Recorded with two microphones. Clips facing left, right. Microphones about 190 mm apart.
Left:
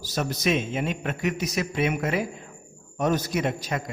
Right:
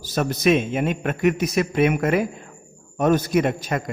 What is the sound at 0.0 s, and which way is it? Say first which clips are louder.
A man's voice: right 6 dB; 55° right (ahead or behind).